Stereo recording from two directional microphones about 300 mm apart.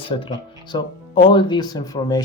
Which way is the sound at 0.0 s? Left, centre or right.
Centre.